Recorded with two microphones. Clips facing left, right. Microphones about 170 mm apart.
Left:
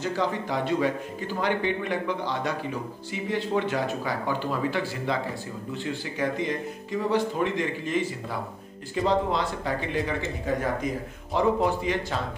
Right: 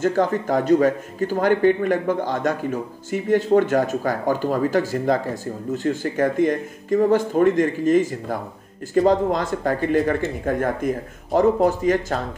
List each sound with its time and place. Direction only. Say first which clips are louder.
0.0 s a man's voice: right 8 dB; 50° right (ahead or behind)